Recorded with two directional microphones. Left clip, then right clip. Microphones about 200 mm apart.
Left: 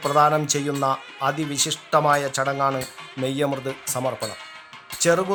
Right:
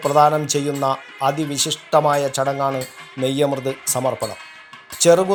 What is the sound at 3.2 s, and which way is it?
Speech, 10° right (ahead or behind).